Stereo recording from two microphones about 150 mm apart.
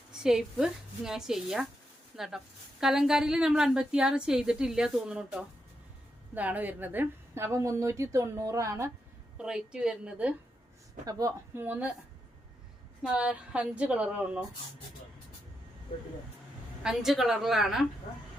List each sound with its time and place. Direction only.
0.1 s a woman's voice: 5° right (ahead or behind); by 8.9 s 20° right (ahead or behind)
9.4 s a woman's voice: 5° right (ahead or behind)
11.0 s a woman's voice: 25° right (ahead or behind)
13.0 s a woman's voice: 5° right (ahead or behind)
16.8 s a woman's voice: centre (ahead or behind)